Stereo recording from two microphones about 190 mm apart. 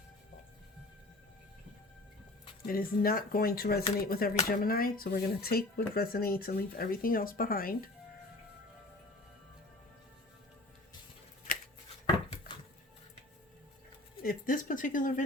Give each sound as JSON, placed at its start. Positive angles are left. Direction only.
{"t": 2.6, "sound": "speech", "side_deg": 50}
{"t": 14.2, "sound": "speech", "side_deg": 50}